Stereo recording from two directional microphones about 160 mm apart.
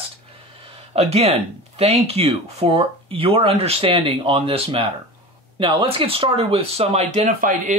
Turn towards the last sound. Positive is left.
turn(degrees=-55)  # may be behind; listen again after turning